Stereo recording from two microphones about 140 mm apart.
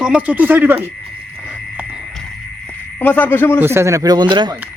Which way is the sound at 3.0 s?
10° left (ahead or behind).